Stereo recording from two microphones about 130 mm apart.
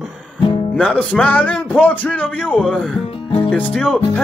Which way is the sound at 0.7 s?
10° left (ahead or behind).